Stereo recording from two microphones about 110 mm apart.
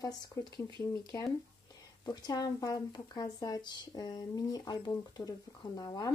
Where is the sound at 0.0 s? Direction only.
35° left (ahead or behind).